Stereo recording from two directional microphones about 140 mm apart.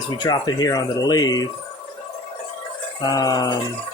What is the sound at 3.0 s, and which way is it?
Speech, 25° left (ahead or behind).